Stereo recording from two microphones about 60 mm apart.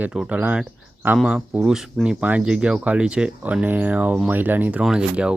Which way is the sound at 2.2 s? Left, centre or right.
Right.